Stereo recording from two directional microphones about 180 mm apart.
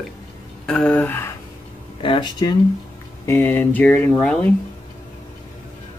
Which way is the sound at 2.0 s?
25° left (ahead or behind).